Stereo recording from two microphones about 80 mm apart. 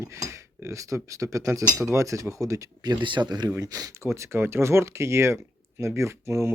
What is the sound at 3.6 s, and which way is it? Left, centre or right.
Speech, right.